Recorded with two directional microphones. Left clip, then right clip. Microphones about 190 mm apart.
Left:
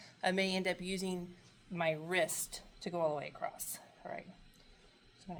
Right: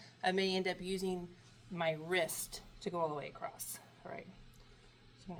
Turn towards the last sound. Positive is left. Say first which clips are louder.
# left 3 dB
turn(degrees=30)  # may be behind; listen again after turning